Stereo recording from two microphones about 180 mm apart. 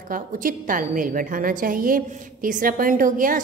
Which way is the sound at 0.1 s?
50° right (ahead or behind).